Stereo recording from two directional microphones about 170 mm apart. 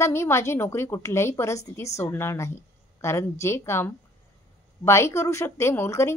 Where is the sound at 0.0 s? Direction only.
15° left (ahead or behind).